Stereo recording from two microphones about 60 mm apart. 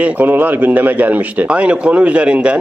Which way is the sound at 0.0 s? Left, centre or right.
Right.